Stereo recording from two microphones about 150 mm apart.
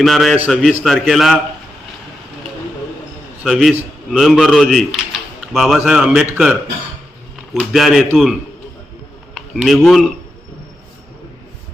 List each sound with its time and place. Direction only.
0.0 s a man's voice: centre (ahead or behind)
0.7 s a man's voice: 5° right (ahead or behind)
3.4 s a man's voice: centre (ahead or behind)
7.5 s a man's voice: 5° right (ahead or behind)